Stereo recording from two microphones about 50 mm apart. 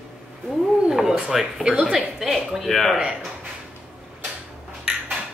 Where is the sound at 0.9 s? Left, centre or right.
Centre.